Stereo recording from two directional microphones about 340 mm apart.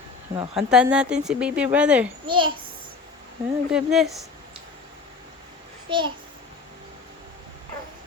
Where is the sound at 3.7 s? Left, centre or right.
Centre.